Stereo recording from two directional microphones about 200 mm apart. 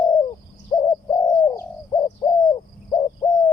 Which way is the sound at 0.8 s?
20° left (ahead or behind).